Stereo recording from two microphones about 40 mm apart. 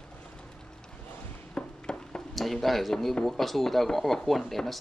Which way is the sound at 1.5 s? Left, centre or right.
Left.